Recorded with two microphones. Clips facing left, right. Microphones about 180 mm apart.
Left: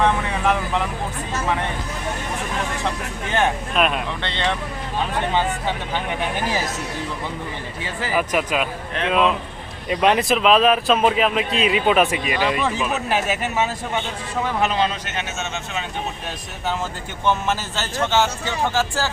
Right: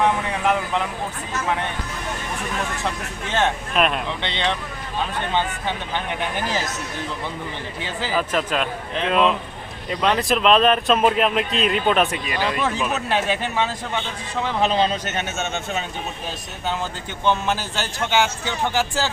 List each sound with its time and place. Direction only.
0.0 s vehicle: 10° right (ahead or behind)
3.4 s a man's voice: centre (ahead or behind)
4.2 s speech: 20° right (ahead or behind)
5.9 s speech: 10° left (ahead or behind)
8.3 s a man's voice: 10° left (ahead or behind)
9.9 s speech: 15° left (ahead or behind)
10.2 s a man's voice: centre (ahead or behind)
12.2 s speech: 15° left (ahead or behind)
12.5 s a man's voice: centre (ahead or behind)
14.7 s a man's voice: 30° right (ahead or behind)
15.4 s speech: 55° right (ahead or behind)
17.2 s speech: 15° right (ahead or behind)